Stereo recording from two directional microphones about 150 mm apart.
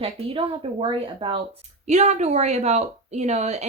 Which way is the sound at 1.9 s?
50° right (ahead or behind).